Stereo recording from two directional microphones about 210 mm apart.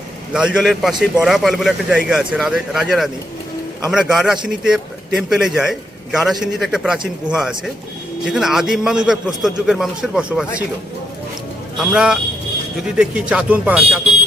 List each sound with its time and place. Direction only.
0.3 s a man's voice: 5° right (ahead or behind)
11.8 s a man's voice: 5° right (ahead or behind)